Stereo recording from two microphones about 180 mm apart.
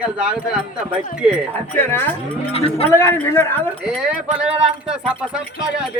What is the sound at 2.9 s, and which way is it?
Speech, 15° left (ahead or behind).